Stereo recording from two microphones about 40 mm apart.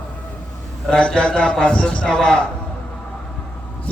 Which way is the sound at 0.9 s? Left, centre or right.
Left.